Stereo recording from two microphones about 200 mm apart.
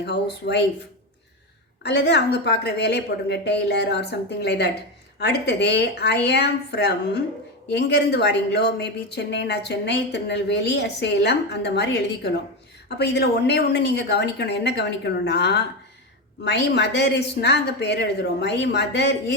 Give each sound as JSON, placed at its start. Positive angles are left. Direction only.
{"t": 0.0, "sound": "speech", "side_deg": 55}
{"t": 1.8, "sound": "speech", "side_deg": 60}